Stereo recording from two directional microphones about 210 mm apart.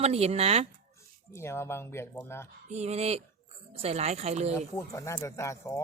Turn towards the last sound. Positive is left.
turn(degrees=15)  # may be behind; listen again after turning